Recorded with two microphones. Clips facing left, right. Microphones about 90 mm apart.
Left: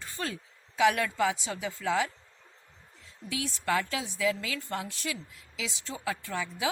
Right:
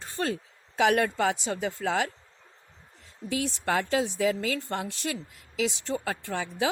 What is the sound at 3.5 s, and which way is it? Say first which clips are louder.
A woman's voice: right 1 dB; 65° right (ahead or behind).